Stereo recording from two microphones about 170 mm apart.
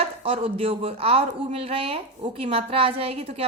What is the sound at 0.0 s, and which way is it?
Speech, 35° right (ahead or behind).